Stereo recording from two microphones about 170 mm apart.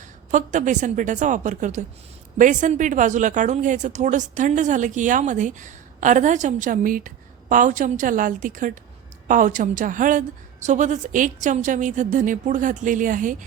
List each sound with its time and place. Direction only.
0.3 s speech: 45° right (ahead or behind)